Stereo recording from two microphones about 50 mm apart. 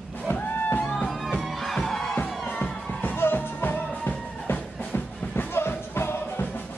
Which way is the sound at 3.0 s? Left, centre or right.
Left.